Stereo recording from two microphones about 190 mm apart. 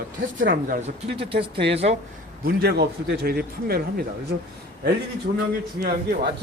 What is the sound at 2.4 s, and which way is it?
A man's voice, 55° right (ahead or behind).